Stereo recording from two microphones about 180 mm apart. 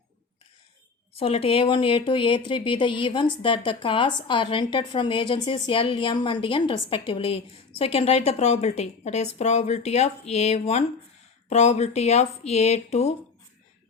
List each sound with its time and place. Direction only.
1.1 s a woman's voice: 30° left (ahead or behind)